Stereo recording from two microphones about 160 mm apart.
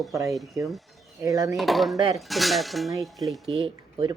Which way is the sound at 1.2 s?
20° right (ahead or behind).